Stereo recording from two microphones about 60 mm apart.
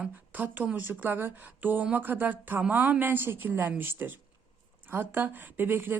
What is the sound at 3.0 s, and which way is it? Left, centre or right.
Speech, right.